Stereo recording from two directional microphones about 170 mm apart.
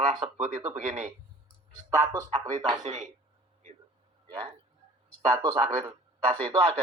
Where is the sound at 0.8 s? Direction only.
50° right (ahead or behind).